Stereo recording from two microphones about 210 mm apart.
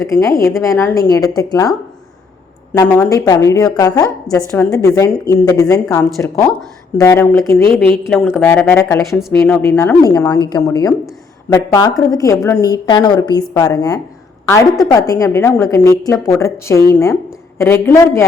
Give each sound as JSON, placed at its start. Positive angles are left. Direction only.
{"t": 0.0, "sound": "a woman's voice", "side_deg": 15}
{"t": 2.7, "sound": "a woman's voice", "side_deg": 10}